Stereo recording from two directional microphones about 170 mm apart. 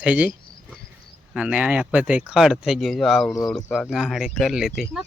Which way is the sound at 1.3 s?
5° right (ahead or behind).